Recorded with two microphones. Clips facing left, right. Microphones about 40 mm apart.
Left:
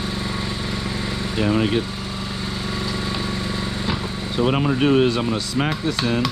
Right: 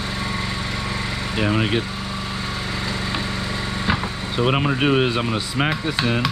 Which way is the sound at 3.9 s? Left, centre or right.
Right.